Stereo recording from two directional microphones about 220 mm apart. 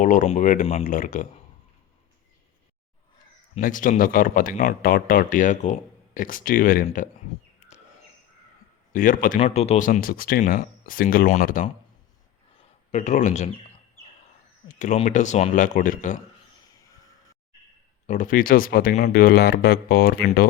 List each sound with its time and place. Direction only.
0.0 s speech: 35° left (ahead or behind)
3.5 s speech: 35° left (ahead or behind)
8.9 s speech: 40° left (ahead or behind)
12.9 s speech: 30° left (ahead or behind)
14.7 s speech: 35° left (ahead or behind)
18.0 s speech: 35° left (ahead or behind)